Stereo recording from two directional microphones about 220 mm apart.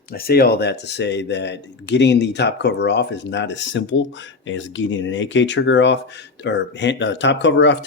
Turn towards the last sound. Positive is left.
turn(degrees=55)  # may be behind; listen again after turning